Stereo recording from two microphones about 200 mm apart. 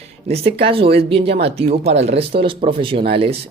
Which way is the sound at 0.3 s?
30° right (ahead or behind).